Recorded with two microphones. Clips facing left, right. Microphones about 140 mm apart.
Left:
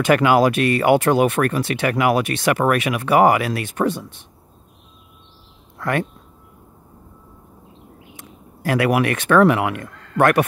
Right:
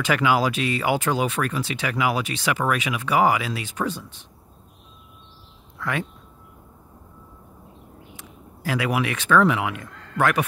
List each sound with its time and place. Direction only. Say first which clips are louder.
0.0 s speech: left 6 dB; 55° left (ahead or behind)
5.8 s a sound: left 6 dB; 50° left (ahead or behind)
8.6 s speech: left 6 dB; 60° left (ahead or behind)